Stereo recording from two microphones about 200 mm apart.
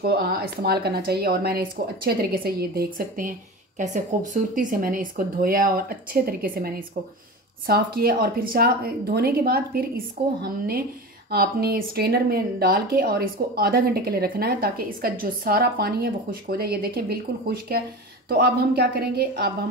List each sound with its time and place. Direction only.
0.0 s speech: 50° right (ahead or behind)
10.2 s a woman's voice: 35° right (ahead or behind)
11.2 s speech: 50° right (ahead or behind)